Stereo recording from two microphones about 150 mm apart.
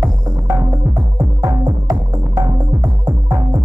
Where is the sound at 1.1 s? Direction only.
25° right (ahead or behind).